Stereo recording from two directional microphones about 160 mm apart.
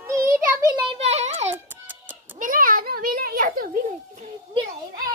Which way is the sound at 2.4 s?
60° right (ahead or behind).